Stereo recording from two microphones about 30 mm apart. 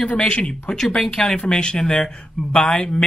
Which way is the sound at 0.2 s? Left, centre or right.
Left.